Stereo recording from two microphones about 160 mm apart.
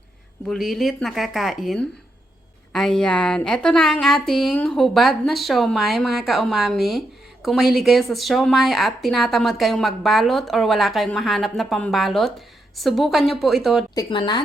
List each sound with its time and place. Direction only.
0.4 s speech: centre (ahead or behind)
13.9 s speech: 25° left (ahead or behind)